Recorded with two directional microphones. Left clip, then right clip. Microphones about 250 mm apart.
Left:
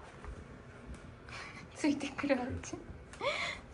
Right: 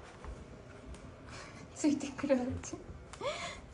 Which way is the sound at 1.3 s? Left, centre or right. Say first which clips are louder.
Left 3 dB; centre.